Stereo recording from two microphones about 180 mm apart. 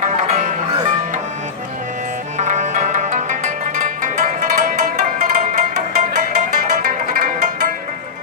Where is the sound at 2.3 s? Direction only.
40° right (ahead or behind).